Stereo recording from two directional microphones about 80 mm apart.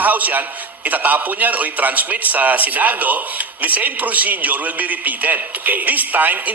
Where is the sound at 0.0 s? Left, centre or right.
Right.